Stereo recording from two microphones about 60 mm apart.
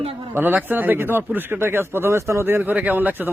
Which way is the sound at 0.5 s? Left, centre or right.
Right.